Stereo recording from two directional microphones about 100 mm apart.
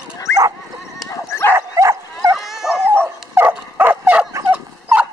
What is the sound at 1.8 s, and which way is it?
Bow-wow, 30° right (ahead or behind).